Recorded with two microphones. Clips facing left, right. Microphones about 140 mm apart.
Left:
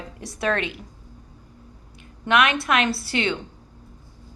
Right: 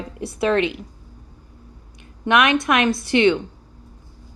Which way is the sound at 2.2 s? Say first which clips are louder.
Right 3 dB; 20° right (ahead or behind).